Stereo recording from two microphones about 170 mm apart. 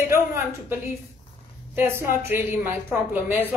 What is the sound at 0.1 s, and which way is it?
Speech, 15° right (ahead or behind).